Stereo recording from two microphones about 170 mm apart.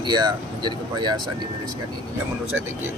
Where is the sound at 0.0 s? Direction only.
25° right (ahead or behind).